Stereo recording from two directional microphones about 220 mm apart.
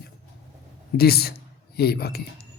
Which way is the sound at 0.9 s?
45° left (ahead or behind).